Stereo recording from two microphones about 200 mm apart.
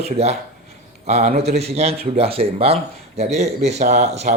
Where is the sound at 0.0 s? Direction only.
30° right (ahead or behind).